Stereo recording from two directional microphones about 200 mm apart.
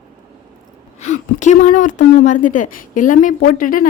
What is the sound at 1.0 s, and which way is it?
A woman's voice, 35° left (ahead or behind).